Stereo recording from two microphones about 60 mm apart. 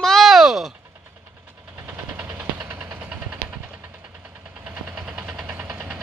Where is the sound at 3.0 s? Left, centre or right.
Right.